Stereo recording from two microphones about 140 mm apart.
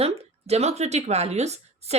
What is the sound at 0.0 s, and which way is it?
A woman's voice, 45° right (ahead or behind).